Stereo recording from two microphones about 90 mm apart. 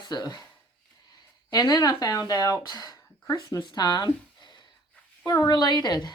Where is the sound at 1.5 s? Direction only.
45° left (ahead or behind).